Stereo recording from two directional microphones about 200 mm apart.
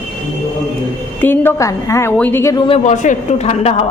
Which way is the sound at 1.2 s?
10° left (ahead or behind).